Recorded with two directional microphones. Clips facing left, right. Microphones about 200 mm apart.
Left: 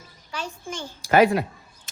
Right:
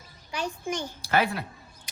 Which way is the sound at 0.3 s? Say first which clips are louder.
Right 3 dB; 15° right (ahead or behind).